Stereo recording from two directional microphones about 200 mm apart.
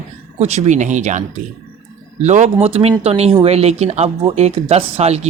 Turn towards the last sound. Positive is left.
turn(degrees=-30)  # may be behind; listen again after turning